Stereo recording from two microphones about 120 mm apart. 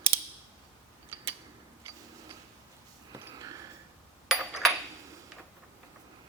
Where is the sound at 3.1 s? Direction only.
30° right (ahead or behind).